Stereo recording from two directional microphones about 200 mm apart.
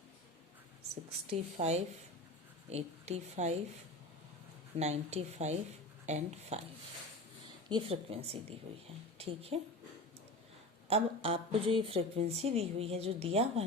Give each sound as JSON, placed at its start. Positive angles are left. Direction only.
{"t": 1.3, "sound": "a woman's voice", "side_deg": -35}
{"t": 4.8, "sound": "a woman's voice", "side_deg": -35}
{"t": 7.7, "sound": "speech", "side_deg": -25}
{"t": 10.8, "sound": "speech", "side_deg": -30}